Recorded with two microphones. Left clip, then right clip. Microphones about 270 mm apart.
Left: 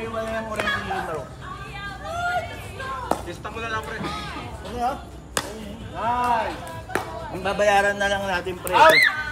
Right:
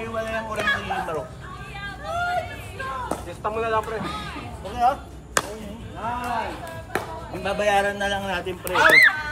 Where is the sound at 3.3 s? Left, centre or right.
Centre.